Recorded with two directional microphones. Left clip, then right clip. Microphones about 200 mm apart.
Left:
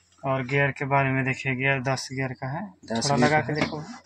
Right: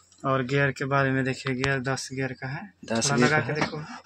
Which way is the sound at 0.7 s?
5° left (ahead or behind).